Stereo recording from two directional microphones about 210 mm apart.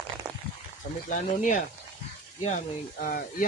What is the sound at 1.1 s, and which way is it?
Speech, 40° left (ahead or behind).